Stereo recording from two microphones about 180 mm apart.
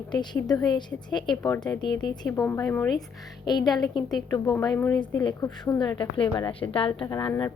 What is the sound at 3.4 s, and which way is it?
Speech, 25° left (ahead or behind).